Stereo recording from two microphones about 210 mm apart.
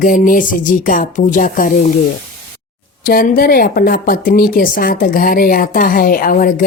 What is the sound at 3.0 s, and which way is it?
Speech, 45° left (ahead or behind).